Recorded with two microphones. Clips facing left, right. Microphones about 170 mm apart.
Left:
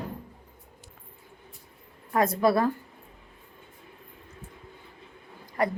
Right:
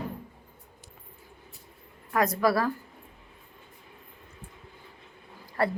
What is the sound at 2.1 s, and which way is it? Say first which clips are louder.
Speech: left 2 dB; 25° left (ahead or behind).